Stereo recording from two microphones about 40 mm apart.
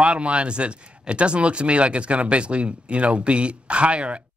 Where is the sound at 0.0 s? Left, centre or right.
Right.